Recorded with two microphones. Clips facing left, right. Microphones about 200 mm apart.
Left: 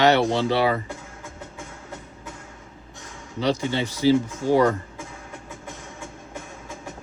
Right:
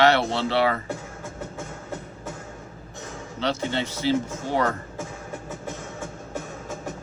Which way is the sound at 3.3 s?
10° left (ahead or behind).